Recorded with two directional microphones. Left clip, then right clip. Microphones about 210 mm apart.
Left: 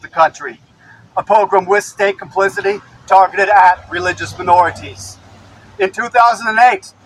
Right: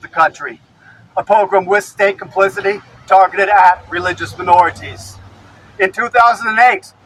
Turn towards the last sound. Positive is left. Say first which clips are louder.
# even
turn(degrees=0)  # may be behind; listen again after turning